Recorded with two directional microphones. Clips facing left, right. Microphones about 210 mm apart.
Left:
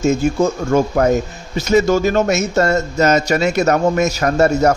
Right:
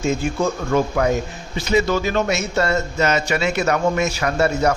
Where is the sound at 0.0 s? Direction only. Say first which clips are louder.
Left 5 dB; 45° left (ahead or behind).